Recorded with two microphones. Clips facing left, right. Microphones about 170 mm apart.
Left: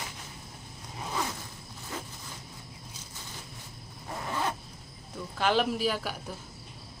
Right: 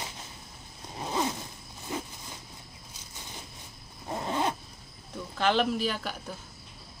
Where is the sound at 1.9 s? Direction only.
15° right (ahead or behind).